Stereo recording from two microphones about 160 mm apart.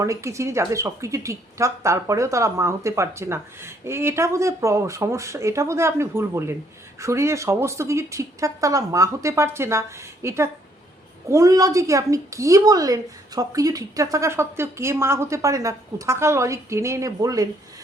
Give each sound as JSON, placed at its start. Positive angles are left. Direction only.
{"t": 0.0, "sound": "a woman's voice", "side_deg": -20}